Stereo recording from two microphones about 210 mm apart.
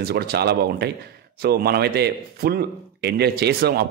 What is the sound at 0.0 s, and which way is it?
A man's voice, 50° right (ahead or behind).